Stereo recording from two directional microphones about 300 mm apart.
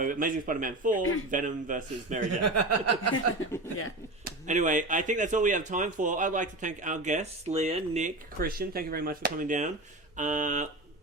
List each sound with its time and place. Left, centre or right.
0.0 s speech: right
2.4 s speech: right
3.5 s speech: centre
4.2 s speech: right